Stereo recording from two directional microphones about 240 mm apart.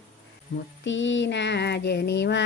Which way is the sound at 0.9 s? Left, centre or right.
Left.